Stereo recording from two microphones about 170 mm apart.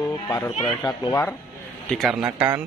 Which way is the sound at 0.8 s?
25° left (ahead or behind).